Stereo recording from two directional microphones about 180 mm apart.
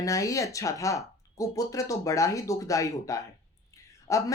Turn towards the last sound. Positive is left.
turn(degrees=15)  # may be behind; listen again after turning